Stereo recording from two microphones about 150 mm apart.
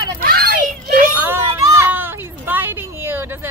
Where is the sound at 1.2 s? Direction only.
15° right (ahead or behind).